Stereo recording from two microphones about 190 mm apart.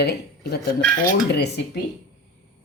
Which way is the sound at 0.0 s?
60° left (ahead or behind).